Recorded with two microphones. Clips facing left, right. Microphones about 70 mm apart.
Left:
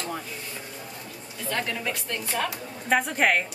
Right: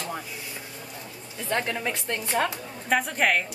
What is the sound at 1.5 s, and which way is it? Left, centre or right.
A woman's voice, right.